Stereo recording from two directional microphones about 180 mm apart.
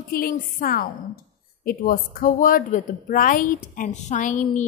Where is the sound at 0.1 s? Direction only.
55° left (ahead or behind).